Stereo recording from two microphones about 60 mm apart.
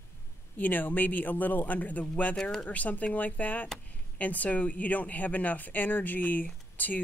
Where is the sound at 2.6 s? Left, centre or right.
Left.